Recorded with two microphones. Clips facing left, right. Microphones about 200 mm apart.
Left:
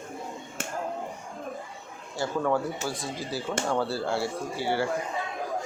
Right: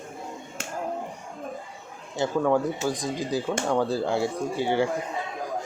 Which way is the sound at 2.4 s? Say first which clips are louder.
Right 4 dB; 15° right (ahead or behind).